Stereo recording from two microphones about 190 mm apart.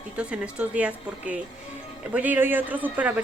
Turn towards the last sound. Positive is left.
turn(degrees=-10)  # may be behind; listen again after turning